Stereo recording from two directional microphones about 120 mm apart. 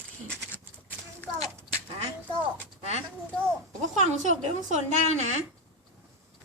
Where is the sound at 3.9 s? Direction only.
80° right.